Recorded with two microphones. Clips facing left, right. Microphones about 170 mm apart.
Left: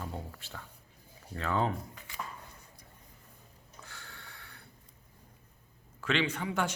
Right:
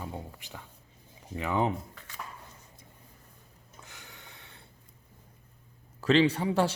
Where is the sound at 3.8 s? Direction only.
15° right (ahead or behind).